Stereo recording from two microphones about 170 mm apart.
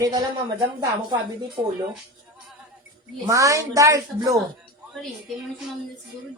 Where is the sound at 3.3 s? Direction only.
20° right (ahead or behind).